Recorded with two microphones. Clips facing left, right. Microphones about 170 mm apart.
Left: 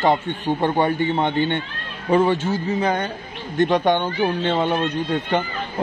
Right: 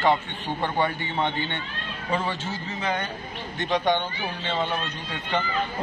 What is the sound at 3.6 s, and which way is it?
A man's voice, 55° left (ahead or behind).